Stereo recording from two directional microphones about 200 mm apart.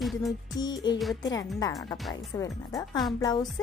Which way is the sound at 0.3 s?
20° left (ahead or behind).